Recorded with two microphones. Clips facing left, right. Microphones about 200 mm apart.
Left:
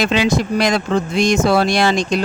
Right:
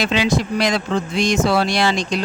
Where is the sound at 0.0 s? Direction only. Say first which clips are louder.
Left 2 dB; 50° left (ahead or behind).